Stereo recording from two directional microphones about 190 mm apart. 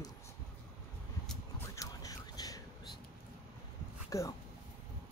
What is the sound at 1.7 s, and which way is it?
Biting, 20° left (ahead or behind).